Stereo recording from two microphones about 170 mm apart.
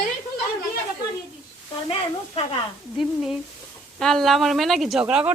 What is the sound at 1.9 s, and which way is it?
Sizzle, 35° left (ahead or behind).